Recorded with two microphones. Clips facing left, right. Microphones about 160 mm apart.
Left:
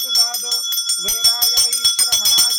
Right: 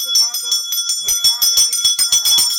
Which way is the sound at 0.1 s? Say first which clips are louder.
Left 8 dB; 55° left (ahead or behind).